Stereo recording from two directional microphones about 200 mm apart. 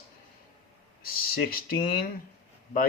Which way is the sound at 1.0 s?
45° left (ahead or behind).